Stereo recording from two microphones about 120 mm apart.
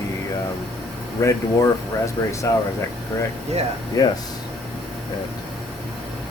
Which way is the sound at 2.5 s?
25° left (ahead or behind).